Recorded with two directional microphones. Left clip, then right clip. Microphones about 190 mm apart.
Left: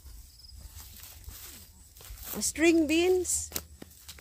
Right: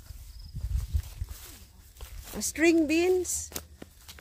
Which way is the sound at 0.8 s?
20° left (ahead or behind).